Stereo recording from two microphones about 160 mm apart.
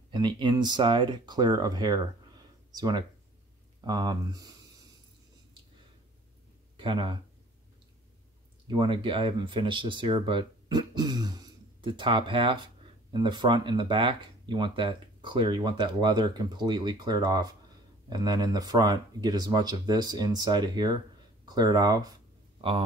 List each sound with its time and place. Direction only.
0.1 s speech: 30° right (ahead or behind)
6.8 s speech: 30° right (ahead or behind)
8.6 s speech: 30° right (ahead or behind)
22.6 s speech: 35° right (ahead or behind)